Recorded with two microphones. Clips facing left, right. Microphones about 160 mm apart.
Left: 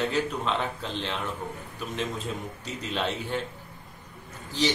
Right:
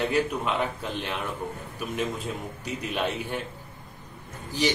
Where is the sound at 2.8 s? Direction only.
15° right (ahead or behind).